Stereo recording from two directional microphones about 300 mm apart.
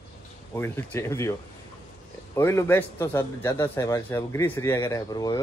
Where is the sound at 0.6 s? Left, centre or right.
Centre.